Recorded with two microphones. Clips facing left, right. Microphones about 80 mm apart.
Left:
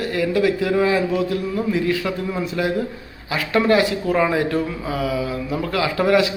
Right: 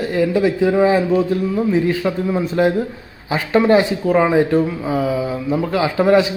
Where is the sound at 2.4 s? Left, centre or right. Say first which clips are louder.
Right 8 dB; right.